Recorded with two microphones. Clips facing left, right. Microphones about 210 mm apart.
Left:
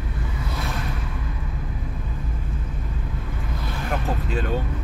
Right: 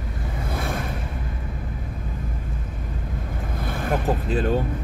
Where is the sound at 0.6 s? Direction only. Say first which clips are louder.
Right 4 dB; 50° right (ahead or behind).